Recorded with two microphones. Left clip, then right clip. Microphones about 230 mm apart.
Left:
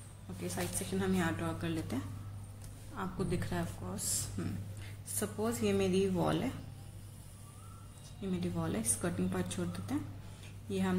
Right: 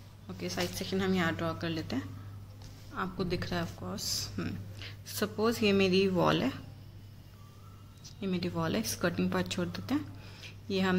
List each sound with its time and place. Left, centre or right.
0.4 s speech: right
8.2 s speech: right